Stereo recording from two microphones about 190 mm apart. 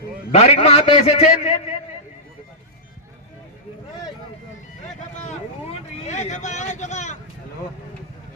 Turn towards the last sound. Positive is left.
turn(degrees=40)  # may be behind; listen again after turning